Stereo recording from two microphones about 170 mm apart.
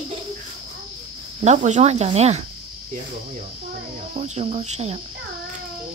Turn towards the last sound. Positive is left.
turn(degrees=-40)  # may be behind; listen again after turning